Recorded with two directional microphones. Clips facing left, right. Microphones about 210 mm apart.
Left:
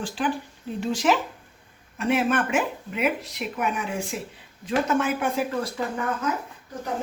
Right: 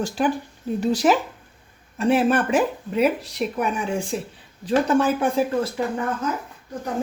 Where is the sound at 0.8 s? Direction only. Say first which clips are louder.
Right 4 dB; 35° right (ahead or behind).